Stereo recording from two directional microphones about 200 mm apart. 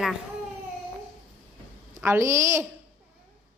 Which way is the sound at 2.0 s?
15° right (ahead or behind).